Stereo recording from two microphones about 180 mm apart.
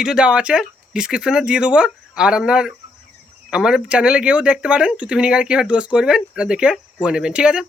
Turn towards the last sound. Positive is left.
turn(degrees=-5)  # may be behind; listen again after turning